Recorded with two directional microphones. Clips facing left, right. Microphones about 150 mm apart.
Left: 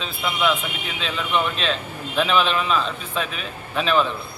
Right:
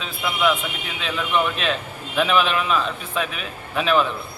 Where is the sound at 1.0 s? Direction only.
5° right (ahead or behind).